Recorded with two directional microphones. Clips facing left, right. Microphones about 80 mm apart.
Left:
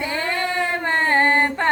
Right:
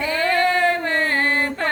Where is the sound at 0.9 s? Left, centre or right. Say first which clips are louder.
Left 3 dB; left.